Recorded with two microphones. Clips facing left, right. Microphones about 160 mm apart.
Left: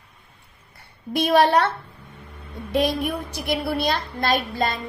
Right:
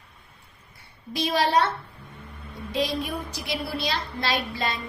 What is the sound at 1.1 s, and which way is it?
Speech, 55° left (ahead or behind).